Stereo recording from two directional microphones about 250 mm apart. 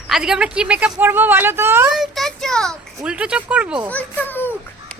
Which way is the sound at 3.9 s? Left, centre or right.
Centre.